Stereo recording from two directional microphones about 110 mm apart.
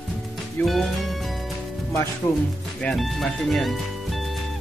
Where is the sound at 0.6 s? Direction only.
15° left (ahead or behind).